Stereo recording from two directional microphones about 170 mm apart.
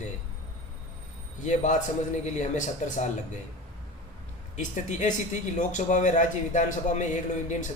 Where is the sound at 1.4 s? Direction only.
45° left (ahead or behind).